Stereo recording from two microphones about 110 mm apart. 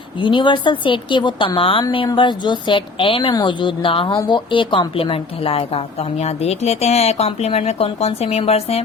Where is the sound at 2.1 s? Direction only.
45° left (ahead or behind); by 8.8 s 65° left (ahead or behind).